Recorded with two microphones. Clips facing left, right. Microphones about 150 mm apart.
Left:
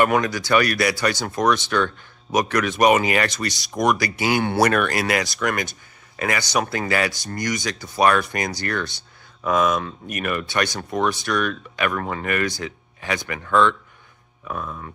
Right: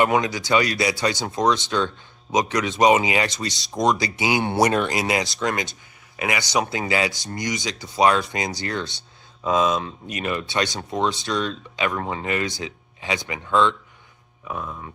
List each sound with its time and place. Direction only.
0.0 s speech: 20° right (ahead or behind)